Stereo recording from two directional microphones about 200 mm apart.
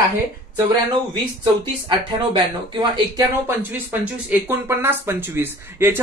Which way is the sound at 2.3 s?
20° right (ahead or behind).